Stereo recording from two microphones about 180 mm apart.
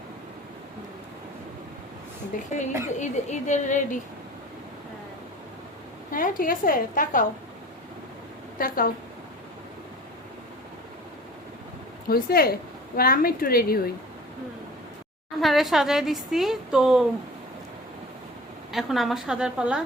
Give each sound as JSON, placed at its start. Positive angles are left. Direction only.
{"t": 2.3, "sound": "a woman's voice", "side_deg": 50}
{"t": 6.1, "sound": "a woman's voice", "side_deg": 50}
{"t": 8.5, "sound": "a woman's voice", "side_deg": 55}
{"t": 12.0, "sound": "a woman's voice", "side_deg": 55}
{"t": 15.4, "sound": "speech", "side_deg": 0}
{"t": 18.7, "sound": "speech", "side_deg": 0}